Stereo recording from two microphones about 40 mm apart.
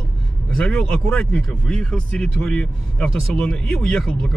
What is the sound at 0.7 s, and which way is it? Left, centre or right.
Speech, centre.